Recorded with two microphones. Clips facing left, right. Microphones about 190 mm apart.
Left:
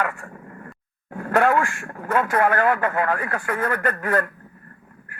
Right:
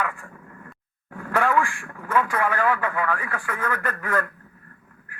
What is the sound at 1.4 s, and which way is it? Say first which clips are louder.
Speech: left 3 dB; 60° left (ahead or behind).